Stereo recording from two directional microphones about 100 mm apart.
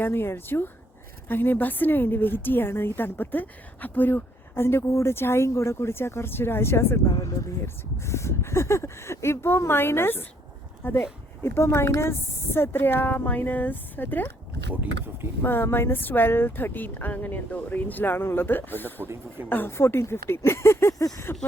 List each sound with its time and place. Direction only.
0.0 s a woman's voice: 25° left (ahead or behind)
14.8 s speech: 20° right (ahead or behind)
15.4 s a woman's voice: 20° left (ahead or behind)
19.0 s speech: 25° right (ahead or behind)
19.5 s a woman's voice: 20° left (ahead or behind)